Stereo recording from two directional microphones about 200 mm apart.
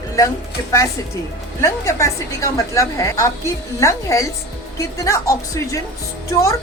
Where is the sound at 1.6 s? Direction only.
15° left (ahead or behind).